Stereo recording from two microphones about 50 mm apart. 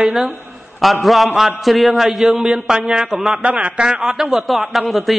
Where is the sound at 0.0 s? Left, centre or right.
Centre.